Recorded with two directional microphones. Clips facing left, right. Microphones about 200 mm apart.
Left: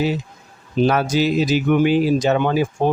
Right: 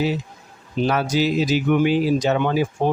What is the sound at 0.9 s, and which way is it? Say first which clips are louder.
Speech: left 1 dB; 50° left (ahead or behind).